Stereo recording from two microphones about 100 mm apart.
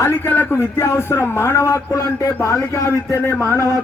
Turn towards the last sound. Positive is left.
turn(degrees=25)  # may be behind; listen again after turning